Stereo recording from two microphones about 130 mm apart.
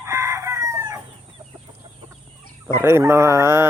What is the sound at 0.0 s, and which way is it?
Chicken, 20° right (ahead or behind).